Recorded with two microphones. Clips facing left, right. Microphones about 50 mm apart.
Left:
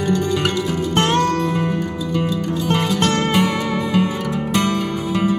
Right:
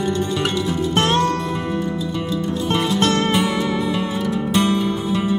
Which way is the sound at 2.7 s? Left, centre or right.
Left.